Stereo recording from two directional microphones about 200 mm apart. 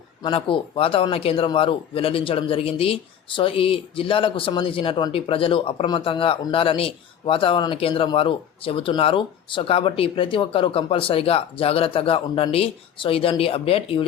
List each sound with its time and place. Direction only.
0.2 s speech: 25° left (ahead or behind)